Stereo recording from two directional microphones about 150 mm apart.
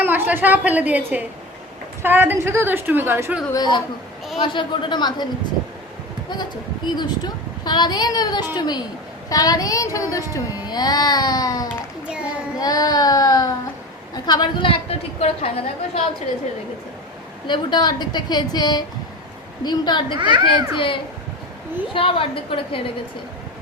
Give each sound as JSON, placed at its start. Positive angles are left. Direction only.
{"t": 0.0, "sound": "a woman's voice", "side_deg": -15}
{"t": 3.5, "sound": "a child's voice", "side_deg": 30}
{"t": 6.8, "sound": "a child's voice", "side_deg": 30}
{"t": 12.0, "sound": "a sound", "side_deg": -5}
{"t": 12.5, "sound": "a child's voice", "side_deg": 25}
{"t": 17.4, "sound": "a child's voice", "side_deg": 30}
{"t": 20.1, "sound": "a child's voice", "side_deg": -35}
{"t": 20.7, "sound": "a woman's voice", "side_deg": 35}